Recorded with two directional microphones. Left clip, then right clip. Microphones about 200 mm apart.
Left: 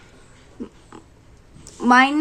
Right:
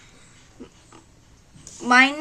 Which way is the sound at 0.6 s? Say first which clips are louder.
Left 8 dB; 20° left (ahead or behind).